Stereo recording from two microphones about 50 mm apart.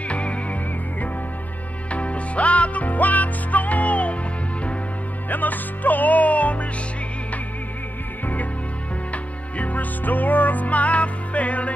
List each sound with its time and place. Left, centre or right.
0.1 s music: left
1.9 s music: left
5.3 s music: left
9.1 s music: left